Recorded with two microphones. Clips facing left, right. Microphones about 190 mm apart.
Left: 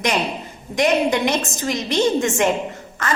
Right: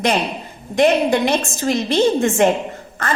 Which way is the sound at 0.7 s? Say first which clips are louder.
Right 3 dB; 55° right (ahead or behind).